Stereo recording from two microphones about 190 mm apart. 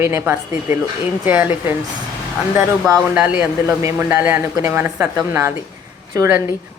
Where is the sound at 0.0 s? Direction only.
10° right (ahead or behind).